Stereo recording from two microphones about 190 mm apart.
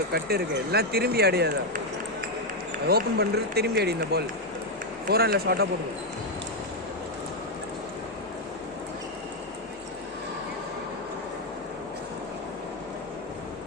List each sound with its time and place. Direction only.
0.1 s speech: 55° right (ahead or behind)
2.8 s speech: 55° right (ahead or behind)